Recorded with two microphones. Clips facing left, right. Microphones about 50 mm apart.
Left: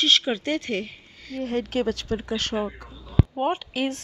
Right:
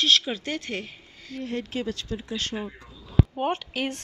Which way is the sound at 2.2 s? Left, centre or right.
Left.